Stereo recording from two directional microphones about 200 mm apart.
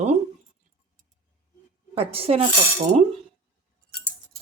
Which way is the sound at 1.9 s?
30° right (ahead or behind).